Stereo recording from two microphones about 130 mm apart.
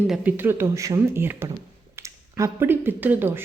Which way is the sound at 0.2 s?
15° right (ahead or behind).